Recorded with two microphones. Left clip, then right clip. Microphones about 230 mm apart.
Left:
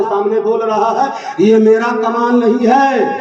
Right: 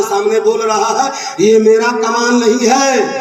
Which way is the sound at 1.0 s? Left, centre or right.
Left.